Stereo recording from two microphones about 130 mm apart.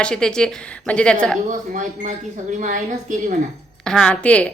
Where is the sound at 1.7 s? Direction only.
80° right.